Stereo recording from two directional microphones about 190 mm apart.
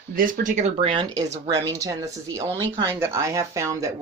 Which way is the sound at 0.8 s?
25° right (ahead or behind).